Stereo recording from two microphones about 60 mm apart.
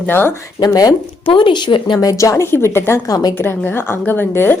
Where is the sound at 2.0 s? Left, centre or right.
Left.